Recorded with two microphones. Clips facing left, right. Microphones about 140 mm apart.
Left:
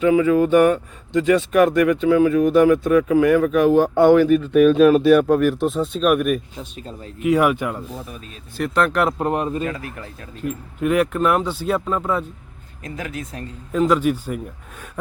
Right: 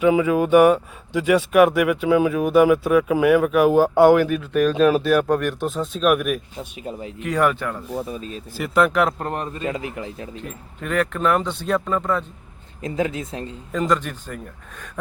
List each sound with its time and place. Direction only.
0.0 s speech: 10° right (ahead or behind)
7.2 s speech: 10° left (ahead or behind)
7.9 s speech: 30° right (ahead or behind)
8.5 s speech: 5° right (ahead or behind)
9.1 s speech: 10° left (ahead or behind)
9.6 s speech: 20° right (ahead or behind)
10.4 s speech: 5° left (ahead or behind)
12.8 s speech: 25° right (ahead or behind)
13.7 s speech: 5° left (ahead or behind)